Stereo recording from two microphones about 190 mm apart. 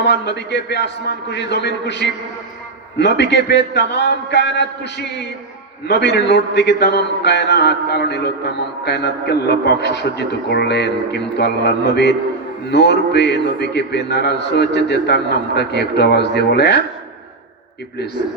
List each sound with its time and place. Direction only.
0.0 s a man's voice: 65° left (ahead or behind)